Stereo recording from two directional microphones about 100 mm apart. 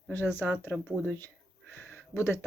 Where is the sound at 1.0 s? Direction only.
20° left (ahead or behind).